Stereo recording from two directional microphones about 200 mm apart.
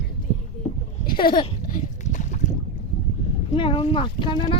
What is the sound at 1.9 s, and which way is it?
Boat, 35° left (ahead or behind).